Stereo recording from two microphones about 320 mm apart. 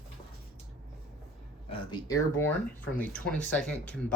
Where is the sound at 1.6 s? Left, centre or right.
Centre.